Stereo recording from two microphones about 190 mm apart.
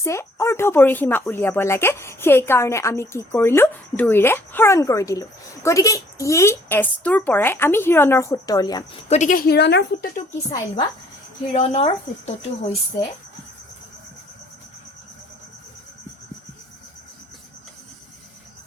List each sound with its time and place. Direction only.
0.0 s speech: 15° left (ahead or behind)
9.0 s speech: 40° left (ahead or behind)
11.5 s speech: 35° left (ahead or behind)